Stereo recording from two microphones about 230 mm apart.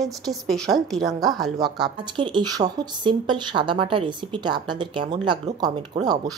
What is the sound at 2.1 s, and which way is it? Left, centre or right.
Speech, right.